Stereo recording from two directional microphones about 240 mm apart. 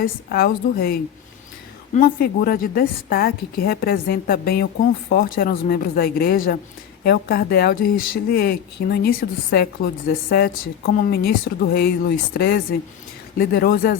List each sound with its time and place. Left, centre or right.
0.0 s speech: left